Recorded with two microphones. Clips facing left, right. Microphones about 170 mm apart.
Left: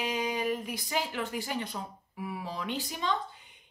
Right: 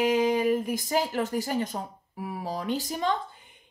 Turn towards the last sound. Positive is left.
turn(degrees=-40)  # may be behind; listen again after turning